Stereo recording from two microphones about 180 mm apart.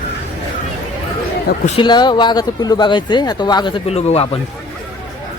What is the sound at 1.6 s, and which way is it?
Speech, 30° left (ahead or behind).